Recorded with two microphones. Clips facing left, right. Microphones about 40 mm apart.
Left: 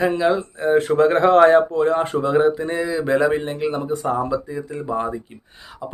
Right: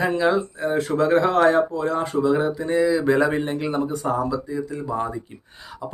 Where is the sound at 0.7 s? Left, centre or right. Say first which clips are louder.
Left 4 dB; left.